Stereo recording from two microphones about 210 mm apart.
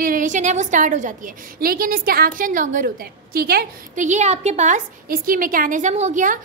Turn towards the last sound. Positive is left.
turn(degrees=-40)  # may be behind; listen again after turning